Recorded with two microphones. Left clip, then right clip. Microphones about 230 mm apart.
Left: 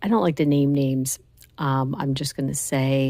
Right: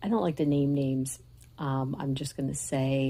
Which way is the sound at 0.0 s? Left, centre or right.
Left.